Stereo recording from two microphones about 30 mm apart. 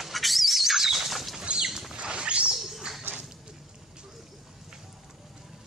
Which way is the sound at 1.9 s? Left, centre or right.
Right.